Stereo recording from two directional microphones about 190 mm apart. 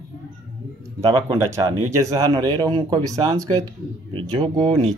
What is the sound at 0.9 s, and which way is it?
Speech, 15° right (ahead or behind).